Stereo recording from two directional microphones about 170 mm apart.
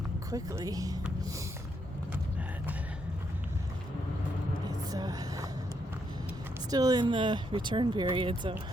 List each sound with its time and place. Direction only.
0.3 s speech: 20° right (ahead or behind)
4.9 s vehicle: 20° right (ahead or behind)
6.7 s speech: 20° right (ahead or behind)